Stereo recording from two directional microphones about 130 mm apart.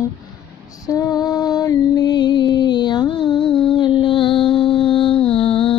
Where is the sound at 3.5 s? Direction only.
40° left (ahead or behind).